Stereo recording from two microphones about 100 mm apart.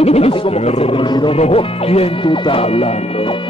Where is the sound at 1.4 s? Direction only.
80° left.